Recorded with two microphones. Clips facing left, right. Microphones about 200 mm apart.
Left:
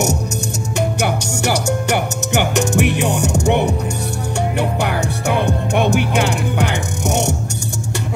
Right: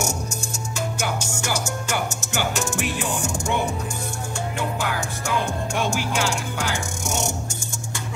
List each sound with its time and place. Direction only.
0.7 s music: 65° left (ahead or behind)